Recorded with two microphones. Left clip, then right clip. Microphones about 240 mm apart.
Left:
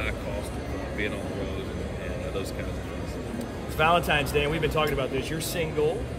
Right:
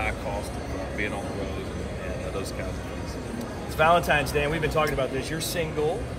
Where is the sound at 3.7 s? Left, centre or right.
Centre.